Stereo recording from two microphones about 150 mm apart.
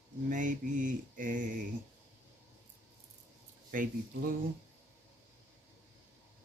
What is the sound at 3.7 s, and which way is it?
Mantra, 65° right (ahead or behind).